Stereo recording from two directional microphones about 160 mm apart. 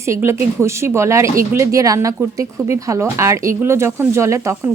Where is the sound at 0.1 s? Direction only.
15° right (ahead or behind).